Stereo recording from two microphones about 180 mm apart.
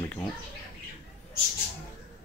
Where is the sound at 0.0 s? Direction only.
15° left (ahead or behind).